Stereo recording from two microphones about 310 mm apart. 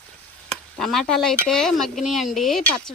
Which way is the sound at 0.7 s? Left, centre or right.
Centre.